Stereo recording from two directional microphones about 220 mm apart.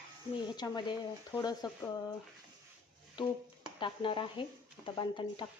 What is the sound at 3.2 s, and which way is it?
A woman's voice, 20° left (ahead or behind).